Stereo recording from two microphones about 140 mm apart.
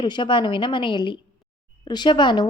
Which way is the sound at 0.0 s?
35° left (ahead or behind).